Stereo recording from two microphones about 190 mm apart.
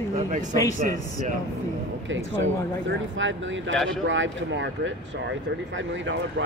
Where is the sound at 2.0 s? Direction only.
85° right.